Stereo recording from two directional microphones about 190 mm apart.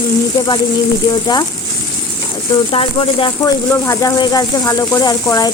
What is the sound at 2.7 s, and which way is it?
Speech, 30° left (ahead or behind).